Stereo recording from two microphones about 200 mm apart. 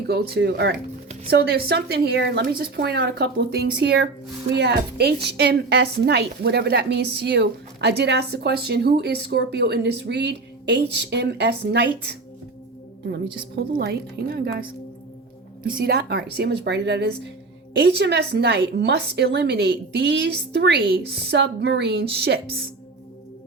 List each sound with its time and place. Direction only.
0.1 s a woman's voice: 55° right (ahead or behind)
13.7 s a woman's voice: 50° right (ahead or behind)
15.7 s a woman's voice: 50° right (ahead or behind)